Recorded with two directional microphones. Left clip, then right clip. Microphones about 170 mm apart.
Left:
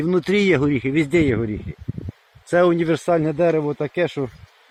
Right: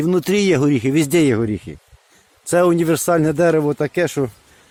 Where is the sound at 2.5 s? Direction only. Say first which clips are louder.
Right 2 dB; 25° right (ahead or behind).